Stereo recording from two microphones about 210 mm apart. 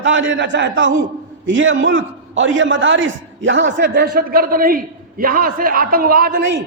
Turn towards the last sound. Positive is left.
turn(degrees=-45)  # may be behind; listen again after turning